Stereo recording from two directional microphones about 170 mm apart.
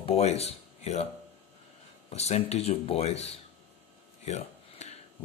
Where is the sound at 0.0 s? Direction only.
35° left (ahead or behind).